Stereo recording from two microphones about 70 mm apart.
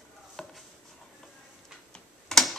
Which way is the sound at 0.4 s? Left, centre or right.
Centre.